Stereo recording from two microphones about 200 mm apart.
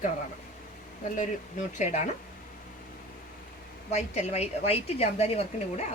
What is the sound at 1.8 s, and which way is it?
Speech, 35° left (ahead or behind).